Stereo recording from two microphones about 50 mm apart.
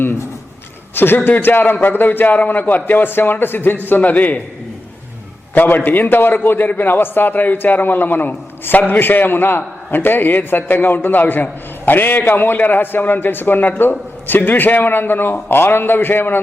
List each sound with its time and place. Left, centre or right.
0.9 s a man's voice: left
5.6 s a man's voice: left